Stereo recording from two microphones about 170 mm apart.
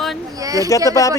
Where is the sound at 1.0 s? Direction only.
20° left (ahead or behind).